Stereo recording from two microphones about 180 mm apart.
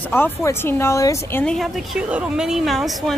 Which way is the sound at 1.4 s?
5° left (ahead or behind).